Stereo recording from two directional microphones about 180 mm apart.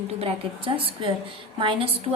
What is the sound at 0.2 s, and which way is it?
A woman's voice, 30° right (ahead or behind).